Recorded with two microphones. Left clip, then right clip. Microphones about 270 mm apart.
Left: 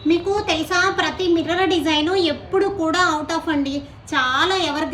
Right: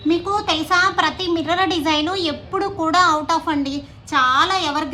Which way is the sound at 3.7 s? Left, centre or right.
Centre.